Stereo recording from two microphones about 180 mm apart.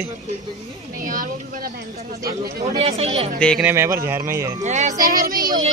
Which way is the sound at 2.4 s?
50° right (ahead or behind).